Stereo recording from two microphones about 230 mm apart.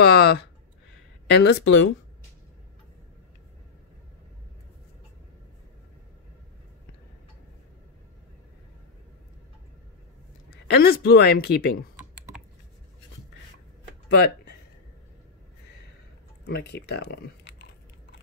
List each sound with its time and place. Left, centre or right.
0.0 s a woman's voice: left
10.5 s a woman's voice: left
14.0 s a sound: left
16.4 s speech: left